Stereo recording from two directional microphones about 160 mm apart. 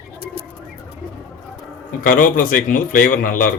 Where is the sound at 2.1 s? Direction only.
60° left (ahead or behind).